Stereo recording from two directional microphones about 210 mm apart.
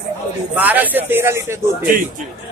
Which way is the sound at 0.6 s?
10° right (ahead or behind).